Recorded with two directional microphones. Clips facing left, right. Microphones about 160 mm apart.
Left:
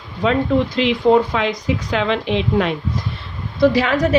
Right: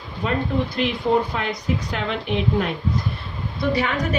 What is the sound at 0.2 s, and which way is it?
A woman's voice, 90° left.